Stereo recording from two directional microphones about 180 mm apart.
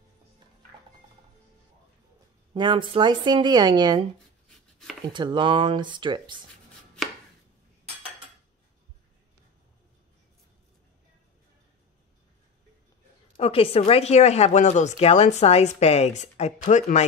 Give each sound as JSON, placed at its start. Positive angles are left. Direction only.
{"t": 2.5, "sound": "a woman's voice", "side_deg": -25}
{"t": 5.1, "sound": "a woman's voice", "side_deg": -25}
{"t": 13.4, "sound": "speech", "side_deg": 30}